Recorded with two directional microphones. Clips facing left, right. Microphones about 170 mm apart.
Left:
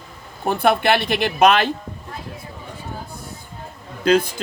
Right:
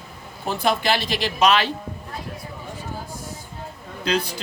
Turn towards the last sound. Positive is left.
turn(degrees=50)  # may be behind; listen again after turning